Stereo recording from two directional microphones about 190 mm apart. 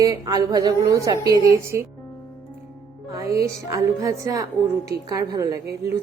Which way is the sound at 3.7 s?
15° right (ahead or behind).